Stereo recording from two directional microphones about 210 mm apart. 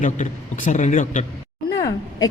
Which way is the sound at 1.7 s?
15° left (ahead or behind).